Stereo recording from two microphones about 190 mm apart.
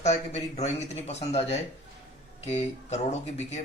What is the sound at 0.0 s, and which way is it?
Speech, 35° left (ahead or behind).